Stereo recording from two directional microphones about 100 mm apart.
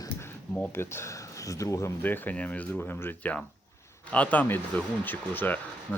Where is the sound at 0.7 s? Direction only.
25° left (ahead or behind).